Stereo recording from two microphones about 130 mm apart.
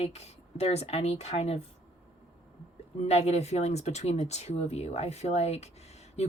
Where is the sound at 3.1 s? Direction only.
55° left (ahead or behind).